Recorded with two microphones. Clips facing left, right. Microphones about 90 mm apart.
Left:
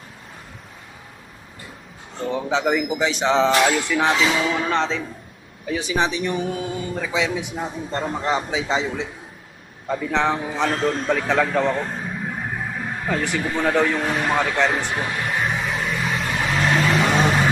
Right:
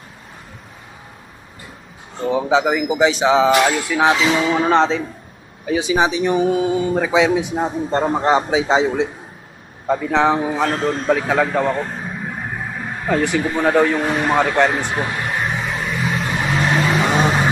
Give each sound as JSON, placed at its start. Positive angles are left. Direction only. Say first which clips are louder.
{"t": 2.1, "sound": "a man's voice", "louder": "right 6 dB", "side_deg": -10}
{"t": 4.6, "sound": "a man's voice", "louder": "right 7 dB", "side_deg": -30}
{"t": 5.8, "sound": "a man's voice", "louder": "right 5 dB", "side_deg": -15}
{"t": 7.5, "sound": "a man's voice", "louder": "right 7 dB", "side_deg": -35}
{"t": 8.5, "sound": "a man's voice", "louder": "right 7 dB", "side_deg": -25}
{"t": 9.8, "sound": "a man's voice", "louder": "right 5 dB", "side_deg": -45}
{"t": 10.1, "sound": "a man's voice", "louder": "right 5 dB", "side_deg": -5}
{"t": 13.4, "sound": "a man's voice", "louder": "right 3 dB", "side_deg": -15}
{"t": 15.4, "sound": "a sound", "louder": "right 1 dB", "side_deg": 0}
{"t": 16.3, "sound": "vehicle", "louder": "right 1 dB", "side_deg": -10}